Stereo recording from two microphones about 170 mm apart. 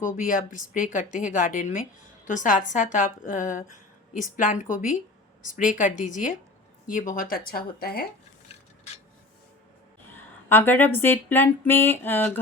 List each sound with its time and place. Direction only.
0.0 s speech: 50° left (ahead or behind)
10.5 s speech: 10° left (ahead or behind)